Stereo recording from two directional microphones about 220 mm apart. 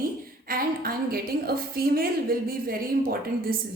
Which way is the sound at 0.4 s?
40° right (ahead or behind).